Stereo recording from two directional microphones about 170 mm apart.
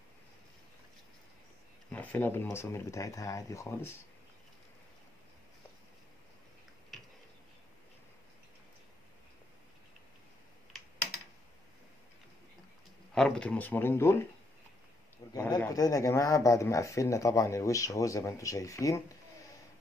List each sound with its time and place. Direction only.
1.9 s speech: 10° left (ahead or behind)
13.1 s speech: 5° left (ahead or behind)
15.5 s speech: 20° left (ahead or behind)